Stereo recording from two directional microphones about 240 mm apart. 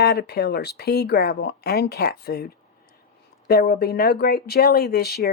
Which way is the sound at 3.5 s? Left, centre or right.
Left.